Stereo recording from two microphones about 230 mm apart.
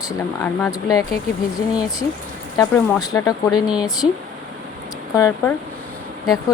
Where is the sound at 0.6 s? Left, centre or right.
Centre.